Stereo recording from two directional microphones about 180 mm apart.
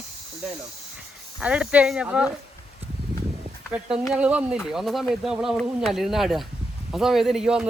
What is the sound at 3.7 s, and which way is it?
Speech, 10° right (ahead or behind).